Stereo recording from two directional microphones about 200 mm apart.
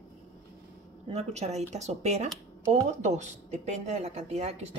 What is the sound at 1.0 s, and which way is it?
A woman's voice, 35° right (ahead or behind).